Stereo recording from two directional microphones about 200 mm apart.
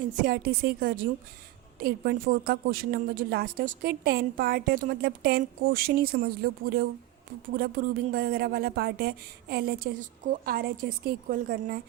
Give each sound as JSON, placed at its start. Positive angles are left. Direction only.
{"t": 0.2, "sound": "a woman's voice", "side_deg": -45}